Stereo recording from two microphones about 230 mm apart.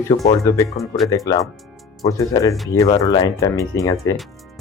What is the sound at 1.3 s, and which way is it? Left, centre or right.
Speech, centre.